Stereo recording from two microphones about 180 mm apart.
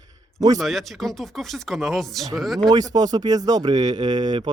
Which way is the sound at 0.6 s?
Centre (ahead or behind).